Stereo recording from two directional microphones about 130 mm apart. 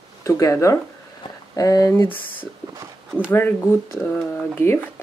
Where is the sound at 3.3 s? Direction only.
15° left (ahead or behind).